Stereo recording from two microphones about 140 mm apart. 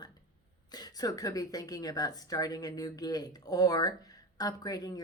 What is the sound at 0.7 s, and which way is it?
Speech, 30° left (ahead or behind).